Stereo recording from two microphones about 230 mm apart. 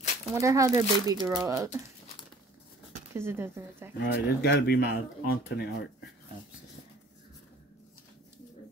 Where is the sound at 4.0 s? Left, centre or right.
Left.